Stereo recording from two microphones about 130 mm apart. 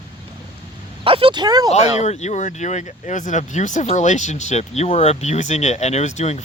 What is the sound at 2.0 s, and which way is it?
Speech, 60° left (ahead or behind).